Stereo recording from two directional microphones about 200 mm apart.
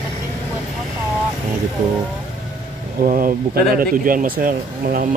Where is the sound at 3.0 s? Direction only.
45° right (ahead or behind).